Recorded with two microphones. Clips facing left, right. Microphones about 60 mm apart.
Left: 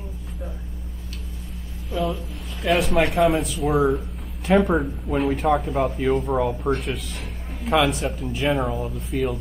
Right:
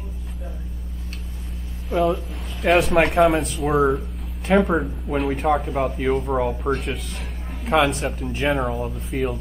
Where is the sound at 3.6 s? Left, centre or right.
Centre.